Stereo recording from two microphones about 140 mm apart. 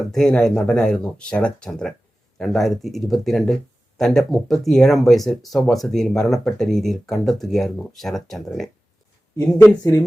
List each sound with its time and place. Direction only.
0.1 s speech: 5° left (ahead or behind)